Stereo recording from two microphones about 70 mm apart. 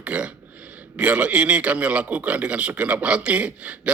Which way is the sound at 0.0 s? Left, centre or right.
Centre.